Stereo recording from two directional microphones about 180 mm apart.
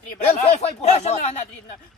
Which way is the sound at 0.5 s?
40° left (ahead or behind).